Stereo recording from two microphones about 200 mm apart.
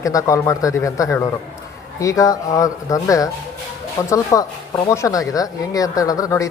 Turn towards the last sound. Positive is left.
turn(degrees=15)  # may be behind; listen again after turning